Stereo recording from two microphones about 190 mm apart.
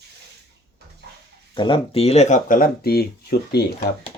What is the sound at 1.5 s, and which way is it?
Speech, 25° left (ahead or behind).